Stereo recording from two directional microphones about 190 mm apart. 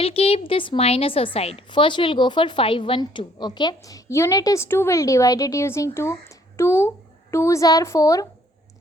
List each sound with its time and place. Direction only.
0.0 s a woman's voice: 30° left (ahead or behind)